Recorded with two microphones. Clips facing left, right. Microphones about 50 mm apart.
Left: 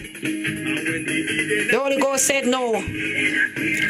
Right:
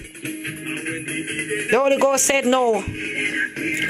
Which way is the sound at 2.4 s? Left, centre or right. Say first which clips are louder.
Right 5 dB; right.